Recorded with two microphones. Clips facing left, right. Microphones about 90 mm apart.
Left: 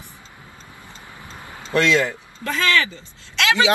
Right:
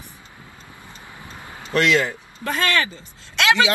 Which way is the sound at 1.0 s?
20° right (ahead or behind).